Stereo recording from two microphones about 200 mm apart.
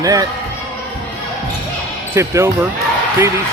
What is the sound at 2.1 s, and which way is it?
Speech, 15° right (ahead or behind).